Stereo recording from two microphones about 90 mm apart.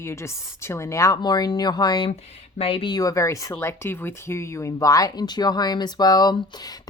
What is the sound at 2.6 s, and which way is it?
Speech, 80° left.